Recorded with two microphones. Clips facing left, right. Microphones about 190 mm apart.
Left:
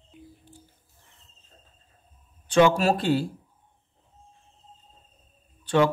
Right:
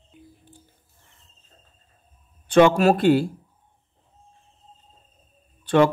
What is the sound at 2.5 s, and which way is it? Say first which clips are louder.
Speech: right 4 dB; 60° right (ahead or behind).